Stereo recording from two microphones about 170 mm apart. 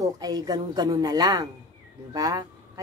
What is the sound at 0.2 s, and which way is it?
Speech, 25° right (ahead or behind).